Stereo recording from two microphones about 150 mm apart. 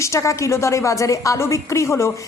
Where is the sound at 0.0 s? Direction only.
20° left (ahead or behind).